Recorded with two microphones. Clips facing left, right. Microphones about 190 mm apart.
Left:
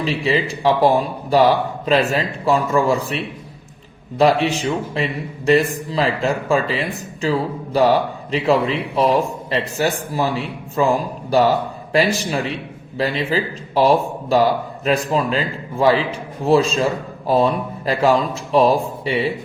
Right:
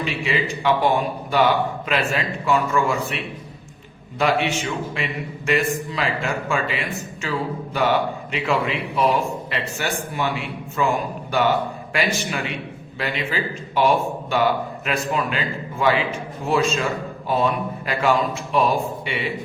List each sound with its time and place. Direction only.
0.0 s a man's voice: 35° left (ahead or behind)